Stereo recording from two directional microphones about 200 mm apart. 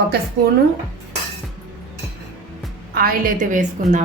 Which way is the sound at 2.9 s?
45° right (ahead or behind).